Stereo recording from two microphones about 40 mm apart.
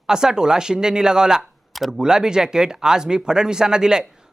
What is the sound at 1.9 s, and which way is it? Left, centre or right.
Speech, centre.